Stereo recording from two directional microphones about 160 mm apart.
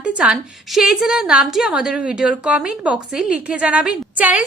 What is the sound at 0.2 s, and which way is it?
A woman's voice, 5° right (ahead or behind).